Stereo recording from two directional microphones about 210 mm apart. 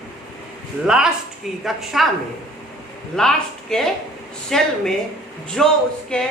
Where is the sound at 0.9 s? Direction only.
5° right (ahead or behind).